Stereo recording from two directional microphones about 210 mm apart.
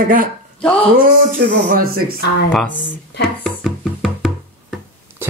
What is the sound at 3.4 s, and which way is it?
Music, centre (ahead or behind).